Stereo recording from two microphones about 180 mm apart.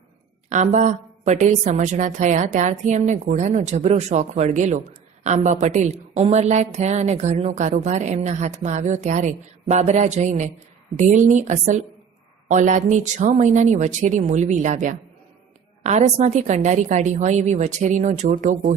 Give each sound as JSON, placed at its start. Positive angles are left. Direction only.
{"t": 0.5, "sound": "a woman's voice", "side_deg": -40}